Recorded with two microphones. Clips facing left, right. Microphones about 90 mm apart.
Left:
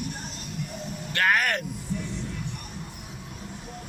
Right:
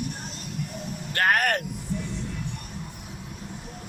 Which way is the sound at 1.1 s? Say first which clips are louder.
Right 1 dB; 45° right (ahead or behind).